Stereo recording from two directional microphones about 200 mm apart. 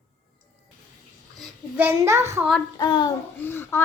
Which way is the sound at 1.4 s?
10° right (ahead or behind).